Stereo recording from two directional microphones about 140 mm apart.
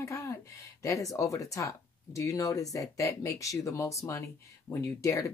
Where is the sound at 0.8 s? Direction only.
20° left (ahead or behind).